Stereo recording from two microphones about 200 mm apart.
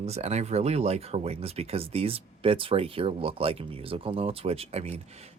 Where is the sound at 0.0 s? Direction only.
35° right (ahead or behind).